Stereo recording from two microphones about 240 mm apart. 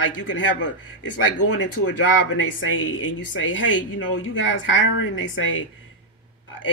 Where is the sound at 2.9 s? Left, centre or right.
Left.